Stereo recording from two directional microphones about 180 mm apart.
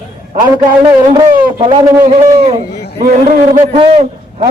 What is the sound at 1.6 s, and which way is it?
Speech, 30° right (ahead or behind).